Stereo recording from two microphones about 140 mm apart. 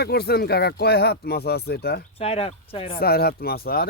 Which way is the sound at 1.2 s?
90° left.